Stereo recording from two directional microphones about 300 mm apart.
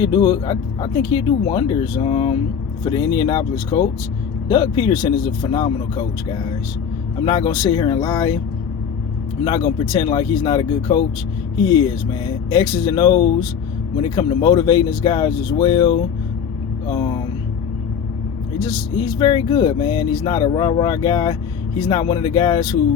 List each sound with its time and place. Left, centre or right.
0.0 s speech: centre
9.4 s speech: centre
16.8 s a sound: centre
18.6 s speech: centre